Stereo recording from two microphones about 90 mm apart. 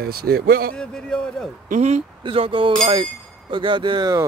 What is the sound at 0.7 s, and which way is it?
Speech, 10° left (ahead or behind).